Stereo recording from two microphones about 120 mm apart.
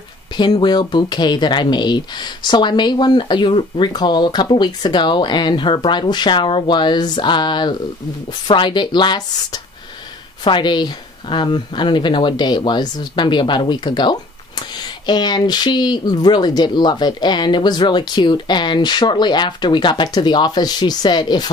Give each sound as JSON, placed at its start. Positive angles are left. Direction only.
{"t": 0.3, "sound": "speech", "side_deg": 40}